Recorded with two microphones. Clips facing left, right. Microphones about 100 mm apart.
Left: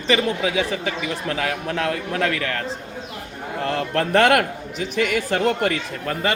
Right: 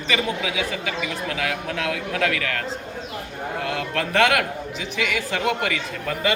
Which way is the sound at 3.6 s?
40° left (ahead or behind).